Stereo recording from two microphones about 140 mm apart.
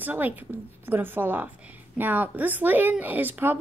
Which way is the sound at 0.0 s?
15° right (ahead or behind).